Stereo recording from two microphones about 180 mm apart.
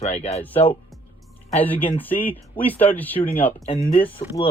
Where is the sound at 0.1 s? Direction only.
35° left (ahead or behind).